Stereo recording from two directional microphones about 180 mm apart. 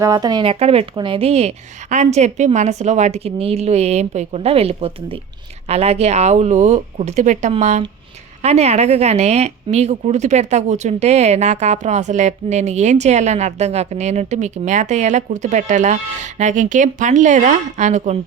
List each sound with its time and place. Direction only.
0.0 s speech: 20° right (ahead or behind); by 18.2 s 40° right (ahead or behind)